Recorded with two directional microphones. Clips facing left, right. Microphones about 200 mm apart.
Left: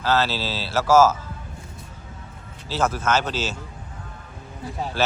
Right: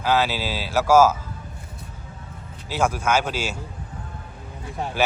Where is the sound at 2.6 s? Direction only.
10° right (ahead or behind).